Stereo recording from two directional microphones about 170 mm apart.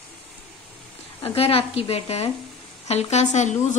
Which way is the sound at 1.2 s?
35° left (ahead or behind).